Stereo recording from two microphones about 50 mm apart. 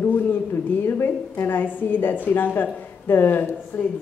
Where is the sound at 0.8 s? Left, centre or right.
Left.